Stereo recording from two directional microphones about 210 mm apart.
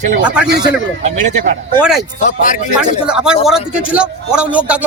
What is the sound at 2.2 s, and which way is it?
Speech, 40° left (ahead or behind).